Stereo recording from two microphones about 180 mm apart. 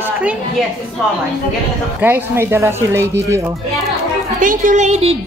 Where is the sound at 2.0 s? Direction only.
10° right (ahead or behind).